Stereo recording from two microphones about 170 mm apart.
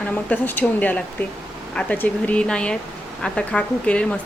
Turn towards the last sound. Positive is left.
turn(degrees=5)  # may be behind; listen again after turning